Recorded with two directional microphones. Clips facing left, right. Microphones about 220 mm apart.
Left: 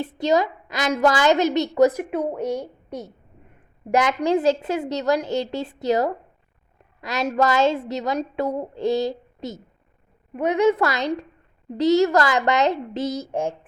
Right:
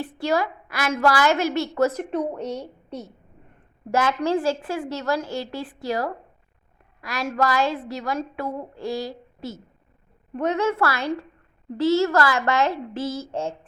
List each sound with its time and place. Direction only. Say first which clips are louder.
0.0 s a woman's voice: left 3 dB; 20° left (ahead or behind)